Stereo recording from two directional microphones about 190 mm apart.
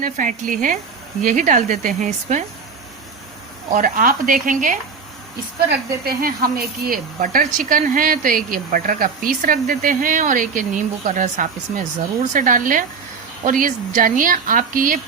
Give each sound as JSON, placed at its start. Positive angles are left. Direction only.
{"t": 0.0, "sound": "speech", "side_deg": -45}
{"t": 3.8, "sound": "speech", "side_deg": -45}